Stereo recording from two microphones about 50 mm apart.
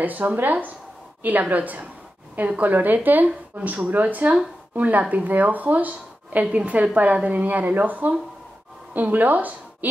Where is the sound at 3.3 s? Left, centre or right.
Right.